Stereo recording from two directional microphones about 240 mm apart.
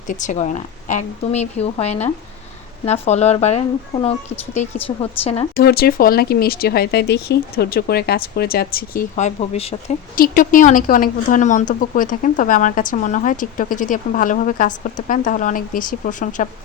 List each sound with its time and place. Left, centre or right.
0.1 s a woman's voice: left
4.9 s a woman's voice: centre
5.5 s a woman's voice: left